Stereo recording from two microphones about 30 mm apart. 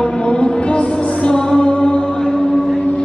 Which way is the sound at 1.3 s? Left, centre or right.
Left.